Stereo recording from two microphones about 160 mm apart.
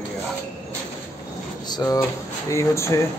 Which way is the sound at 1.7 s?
20° left (ahead or behind).